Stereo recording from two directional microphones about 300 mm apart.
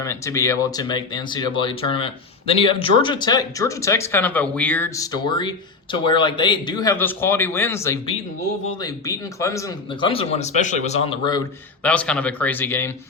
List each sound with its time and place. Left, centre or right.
0.0 s speech: centre